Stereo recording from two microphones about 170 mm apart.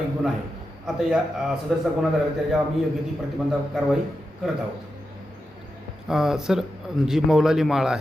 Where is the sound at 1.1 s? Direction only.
5° right (ahead or behind).